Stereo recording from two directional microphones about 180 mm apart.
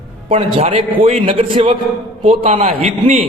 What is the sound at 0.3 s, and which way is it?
A man's voice, 35° right (ahead or behind).